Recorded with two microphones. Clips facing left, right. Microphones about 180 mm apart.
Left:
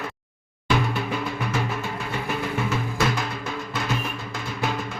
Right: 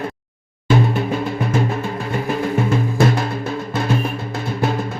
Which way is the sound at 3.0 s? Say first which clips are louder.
Right 7 dB; 50° right (ahead or behind).